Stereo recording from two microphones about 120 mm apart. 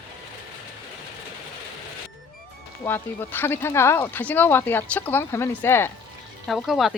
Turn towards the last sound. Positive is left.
turn(degrees=0)  # may be behind; listen again after turning